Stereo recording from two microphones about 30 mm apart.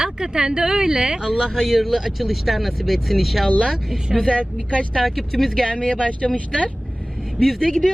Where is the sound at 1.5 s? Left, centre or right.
Centre.